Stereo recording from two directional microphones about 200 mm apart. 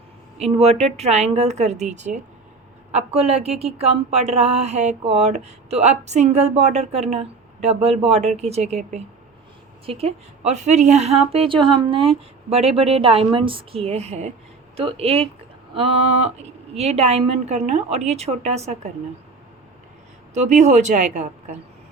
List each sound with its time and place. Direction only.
0.3 s a woman's voice: 30° right (ahead or behind)
20.3 s speech: 35° right (ahead or behind)